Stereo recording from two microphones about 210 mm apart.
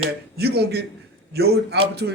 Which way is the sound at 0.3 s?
50° right (ahead or behind).